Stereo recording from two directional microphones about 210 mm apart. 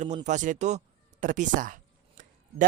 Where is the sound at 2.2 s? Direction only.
40° right (ahead or behind).